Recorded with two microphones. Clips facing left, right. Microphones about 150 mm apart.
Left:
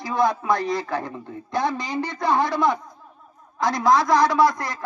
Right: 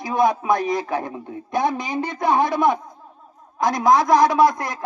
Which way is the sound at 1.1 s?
15° right (ahead or behind).